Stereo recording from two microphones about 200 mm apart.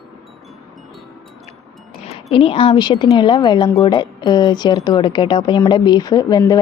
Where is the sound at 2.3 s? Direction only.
25° left (ahead or behind).